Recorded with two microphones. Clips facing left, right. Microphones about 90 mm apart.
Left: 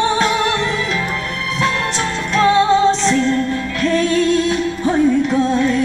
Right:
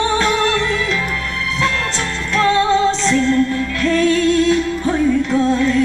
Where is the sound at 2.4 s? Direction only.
15° left (ahead or behind).